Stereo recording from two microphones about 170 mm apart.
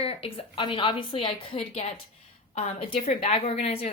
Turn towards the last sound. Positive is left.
turn(degrees=35)  # may be behind; listen again after turning